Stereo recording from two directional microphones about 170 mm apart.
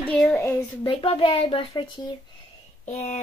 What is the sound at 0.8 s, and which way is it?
A child's voice, 30° left (ahead or behind).